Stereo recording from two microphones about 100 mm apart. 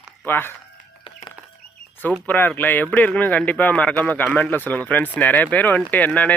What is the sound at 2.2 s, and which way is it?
Speech, 15° left (ahead or behind).